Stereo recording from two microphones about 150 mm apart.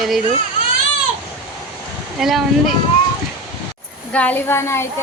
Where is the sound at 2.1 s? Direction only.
Centre (ahead or behind).